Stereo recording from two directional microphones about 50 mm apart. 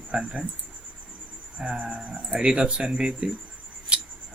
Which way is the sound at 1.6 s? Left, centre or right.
Right.